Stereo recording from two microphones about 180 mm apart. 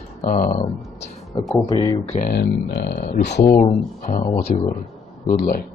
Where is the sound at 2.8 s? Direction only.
65° left (ahead or behind).